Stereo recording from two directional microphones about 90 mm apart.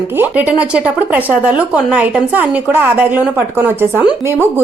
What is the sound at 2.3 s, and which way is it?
A woman's voice, 20° right (ahead or behind).